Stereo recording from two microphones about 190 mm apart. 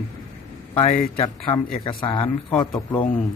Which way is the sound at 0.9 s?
45° left (ahead or behind).